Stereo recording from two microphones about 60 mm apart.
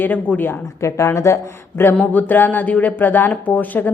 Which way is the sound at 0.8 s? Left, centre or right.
Left.